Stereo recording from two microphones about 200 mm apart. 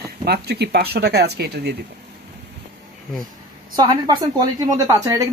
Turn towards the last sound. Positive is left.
turn(degrees=-15)  # may be behind; listen again after turning